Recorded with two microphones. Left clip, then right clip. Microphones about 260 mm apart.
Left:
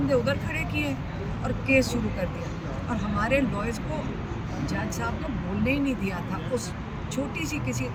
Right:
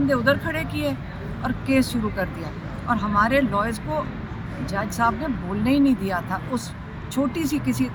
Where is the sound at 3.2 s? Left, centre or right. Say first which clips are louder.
Right 5 dB; centre.